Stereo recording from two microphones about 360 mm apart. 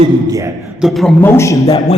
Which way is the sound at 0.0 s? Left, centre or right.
Centre.